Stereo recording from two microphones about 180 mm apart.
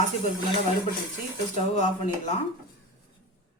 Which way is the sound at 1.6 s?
40° left (ahead or behind).